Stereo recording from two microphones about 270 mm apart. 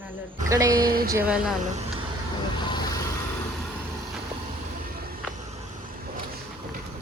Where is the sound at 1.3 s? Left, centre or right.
Centre.